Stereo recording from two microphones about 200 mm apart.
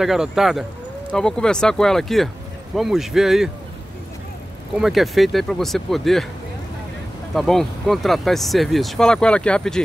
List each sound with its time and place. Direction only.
0.0 s speech: centre (ahead or behind)
4.7 s speech: centre (ahead or behind)
7.3 s speech: centre (ahead or behind)